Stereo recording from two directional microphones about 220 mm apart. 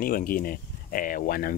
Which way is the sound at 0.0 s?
40° left (ahead or behind).